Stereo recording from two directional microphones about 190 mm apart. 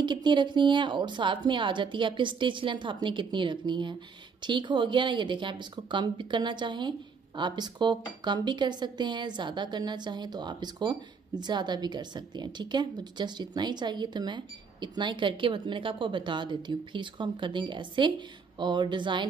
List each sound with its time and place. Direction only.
0.0 s speech: 25° right (ahead or behind)